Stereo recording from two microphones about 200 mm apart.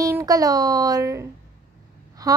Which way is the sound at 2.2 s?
15° right (ahead or behind).